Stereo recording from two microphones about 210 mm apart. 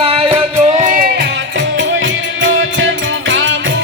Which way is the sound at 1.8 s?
65° right (ahead or behind).